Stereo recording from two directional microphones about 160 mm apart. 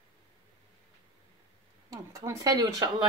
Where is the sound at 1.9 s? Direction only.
20° right (ahead or behind).